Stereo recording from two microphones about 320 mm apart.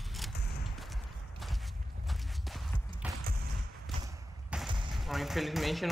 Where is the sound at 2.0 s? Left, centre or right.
Centre.